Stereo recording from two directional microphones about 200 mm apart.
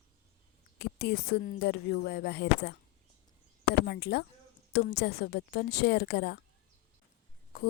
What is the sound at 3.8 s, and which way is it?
A woman's voice, 55° left (ahead or behind).